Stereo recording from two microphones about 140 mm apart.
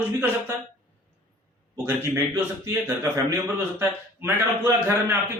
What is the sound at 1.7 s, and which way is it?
Speech, 15° right (ahead or behind).